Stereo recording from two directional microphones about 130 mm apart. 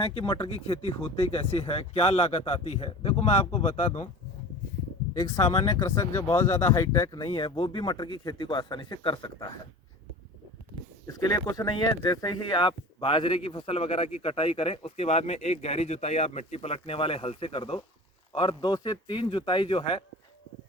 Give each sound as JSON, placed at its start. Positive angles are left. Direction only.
{"t": 0.0, "sound": "speech", "side_deg": 45}
{"t": 3.5, "sound": "speech", "side_deg": 65}
{"t": 5.1, "sound": "speech", "side_deg": 25}
{"t": 7.3, "sound": "a man's voice", "side_deg": 40}
{"t": 11.0, "sound": "a man's voice", "side_deg": 30}